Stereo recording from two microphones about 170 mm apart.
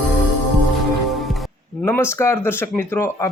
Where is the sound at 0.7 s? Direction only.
Centre (ahead or behind).